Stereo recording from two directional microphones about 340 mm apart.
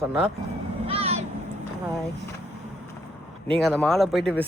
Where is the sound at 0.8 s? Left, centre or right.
Centre.